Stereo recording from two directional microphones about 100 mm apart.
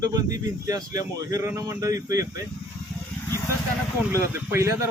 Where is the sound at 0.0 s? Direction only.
35° right (ahead or behind).